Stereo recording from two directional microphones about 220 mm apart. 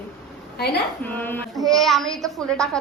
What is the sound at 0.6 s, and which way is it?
Speech, 45° left (ahead or behind).